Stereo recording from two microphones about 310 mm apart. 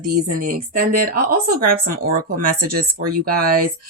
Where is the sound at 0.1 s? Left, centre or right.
Right.